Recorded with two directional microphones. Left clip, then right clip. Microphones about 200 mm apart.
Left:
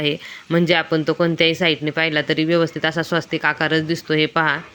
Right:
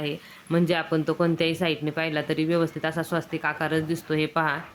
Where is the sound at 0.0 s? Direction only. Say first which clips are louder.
Left 10 dB; 25° left (ahead or behind).